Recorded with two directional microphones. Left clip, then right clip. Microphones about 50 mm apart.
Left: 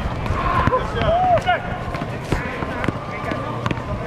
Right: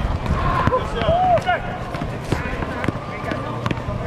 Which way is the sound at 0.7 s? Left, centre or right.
Right.